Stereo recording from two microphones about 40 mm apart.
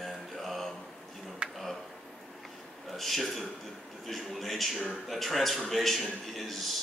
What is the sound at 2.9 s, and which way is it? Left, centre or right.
A man's voice, centre.